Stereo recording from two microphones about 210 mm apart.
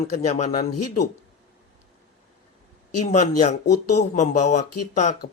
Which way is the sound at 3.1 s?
35° left (ahead or behind).